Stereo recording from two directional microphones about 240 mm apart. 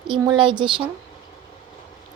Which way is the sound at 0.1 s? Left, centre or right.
Centre.